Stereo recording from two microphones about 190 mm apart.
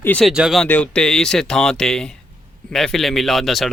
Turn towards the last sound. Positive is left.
turn(degrees=0)  # may be behind; listen again after turning